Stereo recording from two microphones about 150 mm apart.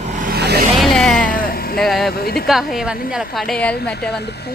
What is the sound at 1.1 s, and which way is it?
Vehicle, 65° left (ahead or behind).